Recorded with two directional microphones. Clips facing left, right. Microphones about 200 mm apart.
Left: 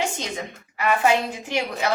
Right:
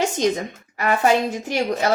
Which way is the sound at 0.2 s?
40° right (ahead or behind).